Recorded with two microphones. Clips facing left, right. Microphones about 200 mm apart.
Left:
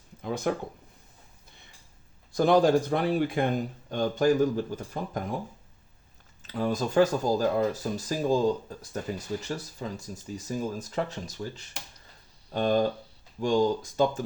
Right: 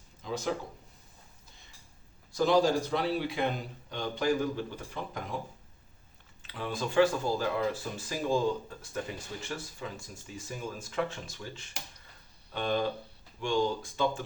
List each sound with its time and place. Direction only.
0.2 s speech: 55° left (ahead or behind)
2.3 s a man's voice: 55° left (ahead or behind)
6.4 s speech: 40° left (ahead or behind)